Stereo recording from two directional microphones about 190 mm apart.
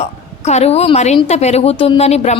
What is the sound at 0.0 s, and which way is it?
A woman's voice, 35° left (ahead or behind).